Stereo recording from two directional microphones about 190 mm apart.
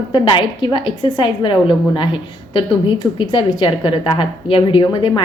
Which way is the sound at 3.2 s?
25° left (ahead or behind).